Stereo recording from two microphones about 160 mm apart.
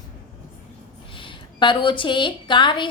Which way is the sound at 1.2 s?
30° left (ahead or behind).